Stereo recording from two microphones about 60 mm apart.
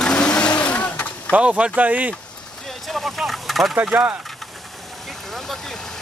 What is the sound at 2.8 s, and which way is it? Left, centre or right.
Vehicle, centre.